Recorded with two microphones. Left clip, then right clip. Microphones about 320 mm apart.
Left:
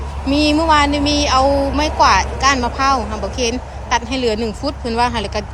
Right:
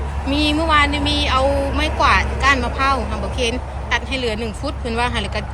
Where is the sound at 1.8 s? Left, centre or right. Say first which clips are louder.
Left 3 dB; centre.